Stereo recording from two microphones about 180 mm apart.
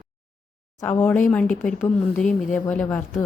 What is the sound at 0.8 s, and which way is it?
A woman's voice, 10° left (ahead or behind).